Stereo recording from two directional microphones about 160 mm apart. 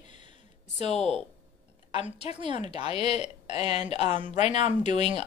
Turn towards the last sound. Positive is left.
turn(degrees=45)  # may be behind; listen again after turning